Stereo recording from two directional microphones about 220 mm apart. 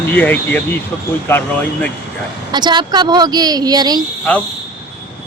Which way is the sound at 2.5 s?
20° right (ahead or behind).